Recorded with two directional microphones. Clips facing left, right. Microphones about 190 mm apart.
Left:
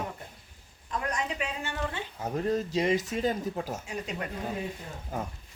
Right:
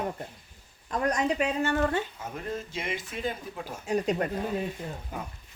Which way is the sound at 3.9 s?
40° right (ahead or behind).